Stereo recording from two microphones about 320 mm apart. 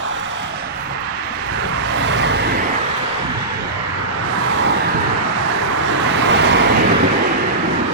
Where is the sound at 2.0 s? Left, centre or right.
Right.